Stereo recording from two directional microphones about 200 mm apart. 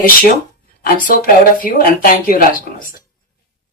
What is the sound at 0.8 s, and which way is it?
A woman's voice, 45° left (ahead or behind).